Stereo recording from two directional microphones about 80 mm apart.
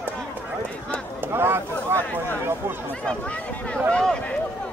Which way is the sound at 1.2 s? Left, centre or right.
Right.